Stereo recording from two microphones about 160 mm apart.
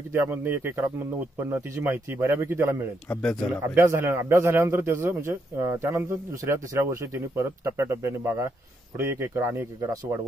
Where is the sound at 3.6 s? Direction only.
15° right (ahead or behind).